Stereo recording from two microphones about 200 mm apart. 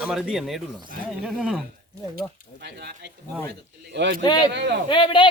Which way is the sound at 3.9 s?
60° right (ahead or behind).